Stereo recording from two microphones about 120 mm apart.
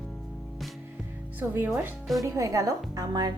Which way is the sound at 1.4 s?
15° right (ahead or behind).